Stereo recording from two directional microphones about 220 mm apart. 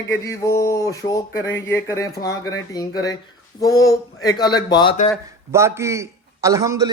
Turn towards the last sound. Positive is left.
turn(degrees=-15)  # may be behind; listen again after turning